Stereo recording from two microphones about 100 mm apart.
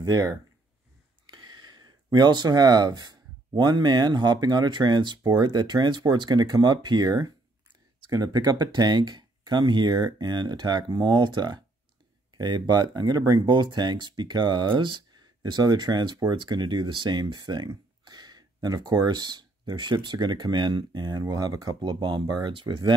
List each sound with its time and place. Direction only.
0.0 s speech: 35° right (ahead or behind)
1.2 s speech: 50° right (ahead or behind)